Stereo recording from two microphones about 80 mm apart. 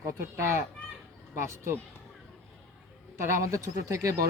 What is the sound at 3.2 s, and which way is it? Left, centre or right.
Speech, right.